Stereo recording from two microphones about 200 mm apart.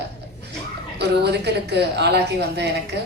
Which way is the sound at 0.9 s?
55° right (ahead or behind).